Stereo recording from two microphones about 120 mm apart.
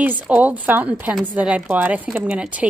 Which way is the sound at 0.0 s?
15° right (ahead or behind).